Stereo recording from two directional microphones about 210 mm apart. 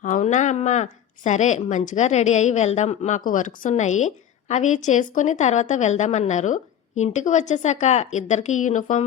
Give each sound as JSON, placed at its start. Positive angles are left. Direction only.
{"t": 0.0, "sound": "speech", "side_deg": 35}